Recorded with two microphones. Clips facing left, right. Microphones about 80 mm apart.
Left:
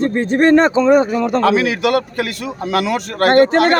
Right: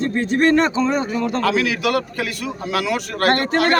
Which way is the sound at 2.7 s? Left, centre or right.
Left.